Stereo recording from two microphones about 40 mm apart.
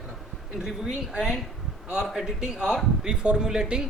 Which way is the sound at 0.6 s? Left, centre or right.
Centre.